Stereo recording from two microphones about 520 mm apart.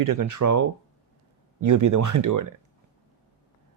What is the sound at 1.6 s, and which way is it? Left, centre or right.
Speech, right.